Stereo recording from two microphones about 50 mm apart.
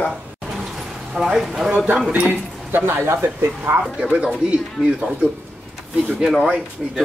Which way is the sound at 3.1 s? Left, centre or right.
Right.